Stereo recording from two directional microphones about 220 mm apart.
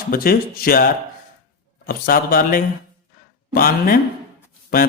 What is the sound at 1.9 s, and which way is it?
A man's voice, 40° left (ahead or behind).